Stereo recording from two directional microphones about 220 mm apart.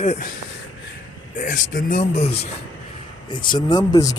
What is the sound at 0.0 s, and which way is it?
Speech, 30° left (ahead or behind).